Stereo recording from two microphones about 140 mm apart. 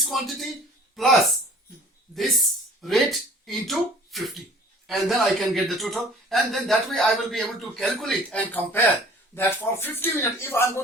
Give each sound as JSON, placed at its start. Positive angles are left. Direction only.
{"t": 0.0, "sound": "speech", "side_deg": 0}